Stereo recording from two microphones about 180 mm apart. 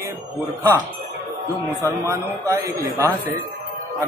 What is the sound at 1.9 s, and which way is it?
Speech, 20° right (ahead or behind).